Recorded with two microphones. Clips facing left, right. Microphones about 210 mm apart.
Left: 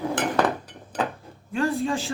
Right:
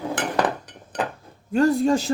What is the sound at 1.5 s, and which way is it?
Speech, 40° right (ahead or behind).